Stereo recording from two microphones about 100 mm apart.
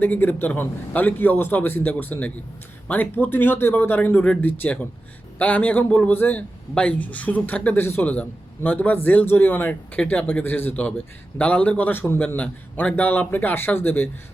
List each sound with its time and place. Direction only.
0.0 s a man's voice: 20° left (ahead or behind)